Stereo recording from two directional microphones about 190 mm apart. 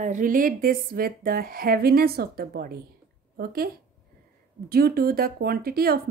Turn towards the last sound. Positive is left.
turn(degrees=-50)  # may be behind; listen again after turning